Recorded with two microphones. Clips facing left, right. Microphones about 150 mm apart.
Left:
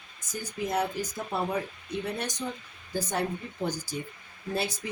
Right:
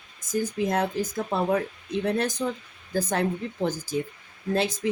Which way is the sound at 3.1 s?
90° right.